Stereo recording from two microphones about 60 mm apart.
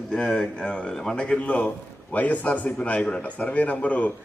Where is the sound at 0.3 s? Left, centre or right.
Centre.